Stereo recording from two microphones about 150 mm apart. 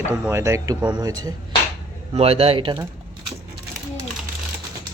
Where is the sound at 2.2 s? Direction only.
40° right (ahead or behind).